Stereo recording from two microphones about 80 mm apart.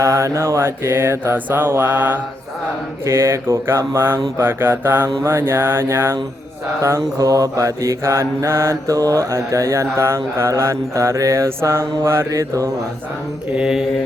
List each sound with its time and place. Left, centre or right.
0.0 s mantra: right
3.1 s speech: right
4.4 s mantra: right
6.8 s speech: right
9.0 s mantra: right
9.3 s speech: right
12.3 s mantra: right
13.6 s mantra: centre